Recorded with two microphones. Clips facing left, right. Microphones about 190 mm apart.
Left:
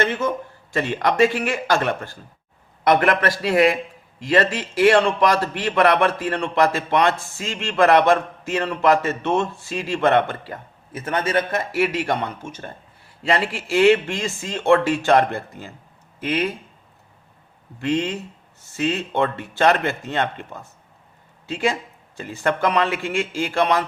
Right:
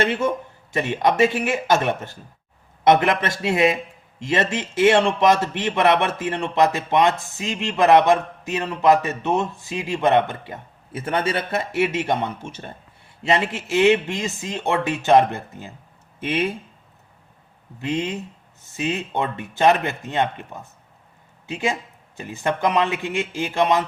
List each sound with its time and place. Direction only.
0.7 s a man's voice: 20° right (ahead or behind)
10.9 s a man's voice: 30° right (ahead or behind)
17.7 s a man's voice: 20° right (ahead or behind)